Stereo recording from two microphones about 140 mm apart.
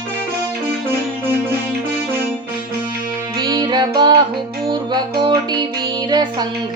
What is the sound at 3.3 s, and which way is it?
Music, 30° right (ahead or behind).